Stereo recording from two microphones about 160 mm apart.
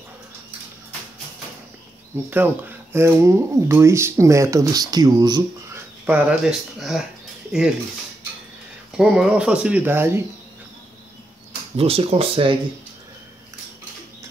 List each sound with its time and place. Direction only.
2.3 s speech: 10° right (ahead or behind)
6.0 s speech: 10° right (ahead or behind)
8.9 s speech: 5° right (ahead or behind)
11.7 s speech: 35° right (ahead or behind)